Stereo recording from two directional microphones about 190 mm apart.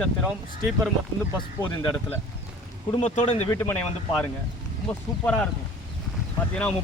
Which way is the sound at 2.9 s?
35° left (ahead or behind).